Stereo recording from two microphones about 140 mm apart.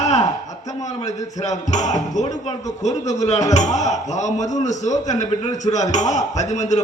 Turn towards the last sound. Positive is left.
turn(degrees=55)  # may be behind; listen again after turning